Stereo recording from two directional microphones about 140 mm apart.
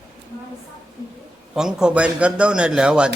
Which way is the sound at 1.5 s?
5° right (ahead or behind).